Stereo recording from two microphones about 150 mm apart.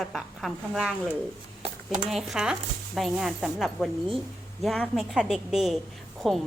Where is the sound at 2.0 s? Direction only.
Centre (ahead or behind).